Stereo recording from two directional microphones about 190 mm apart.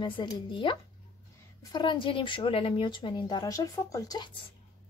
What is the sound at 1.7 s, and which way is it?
Speech, 25° left (ahead or behind).